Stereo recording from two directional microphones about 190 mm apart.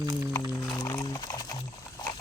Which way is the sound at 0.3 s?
20° left (ahead or behind).